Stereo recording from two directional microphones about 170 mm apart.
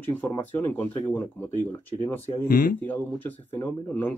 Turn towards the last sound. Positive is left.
turn(degrees=10)  # may be behind; listen again after turning